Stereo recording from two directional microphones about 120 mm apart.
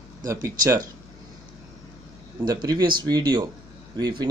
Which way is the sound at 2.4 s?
35° right (ahead or behind).